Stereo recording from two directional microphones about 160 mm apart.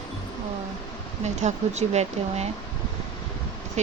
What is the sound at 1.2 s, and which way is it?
Speech, 45° right (ahead or behind).